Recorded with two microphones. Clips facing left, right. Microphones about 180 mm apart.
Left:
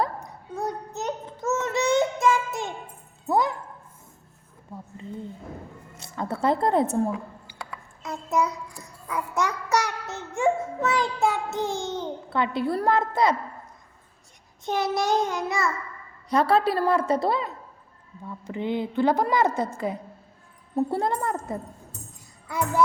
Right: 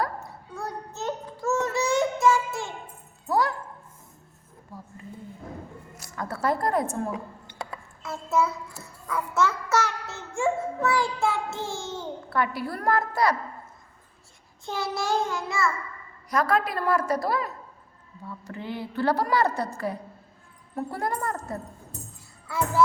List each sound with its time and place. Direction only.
0.0 s a sound: 20° left (ahead or behind)
3.2 s speech: 20° left (ahead or behind)
4.7 s a woman's voice: 25° left (ahead or behind)
6.0 s speech: 25° left (ahead or behind)
8.0 s child singing: 15° left (ahead or behind)
14.6 s child singing: 20° left (ahead or behind)
16.3 s child singing: 30° left (ahead or behind)